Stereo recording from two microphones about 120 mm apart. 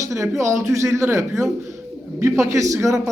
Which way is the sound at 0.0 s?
25° right (ahead or behind).